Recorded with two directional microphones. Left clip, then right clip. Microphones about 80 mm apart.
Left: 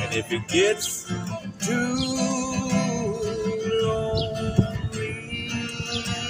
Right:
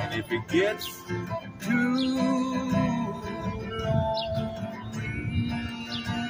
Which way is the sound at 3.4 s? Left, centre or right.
Right.